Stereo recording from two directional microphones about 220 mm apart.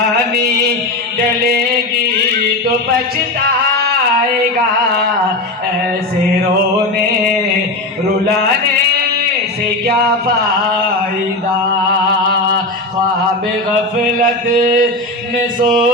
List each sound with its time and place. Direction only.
14.2 s mantra: 40° right (ahead or behind)